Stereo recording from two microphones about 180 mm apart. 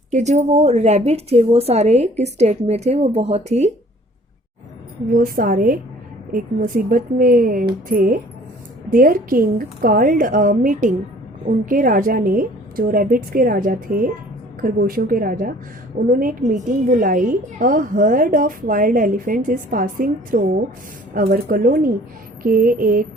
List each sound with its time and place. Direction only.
0.1 s a woman's voice: 40° right (ahead or behind)
5.1 s a woman's voice: 50° right (ahead or behind)